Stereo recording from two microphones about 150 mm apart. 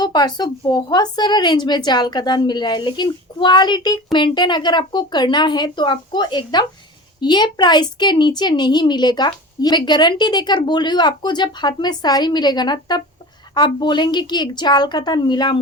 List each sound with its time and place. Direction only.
0.0 s a woman's voice: 30° left (ahead or behind)